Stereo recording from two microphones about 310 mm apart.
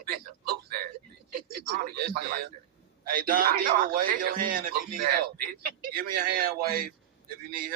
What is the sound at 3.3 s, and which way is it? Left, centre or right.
Speech, right.